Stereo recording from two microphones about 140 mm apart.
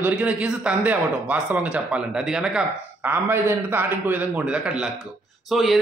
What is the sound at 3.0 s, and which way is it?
A man's voice, 15° right (ahead or behind).